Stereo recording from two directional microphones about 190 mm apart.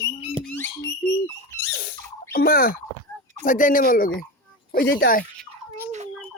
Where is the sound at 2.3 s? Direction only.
50° left (ahead or behind).